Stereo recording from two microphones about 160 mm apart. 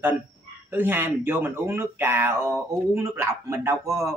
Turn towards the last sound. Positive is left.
turn(degrees=-20)  # may be behind; listen again after turning